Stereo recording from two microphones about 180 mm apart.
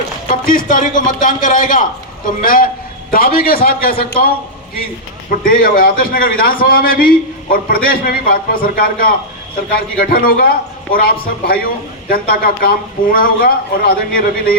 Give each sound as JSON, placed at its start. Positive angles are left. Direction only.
{"t": 0.3, "sound": "a man's voice", "side_deg": 50}